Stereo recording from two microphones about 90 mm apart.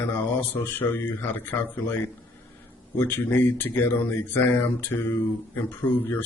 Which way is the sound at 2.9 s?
25° left (ahead or behind).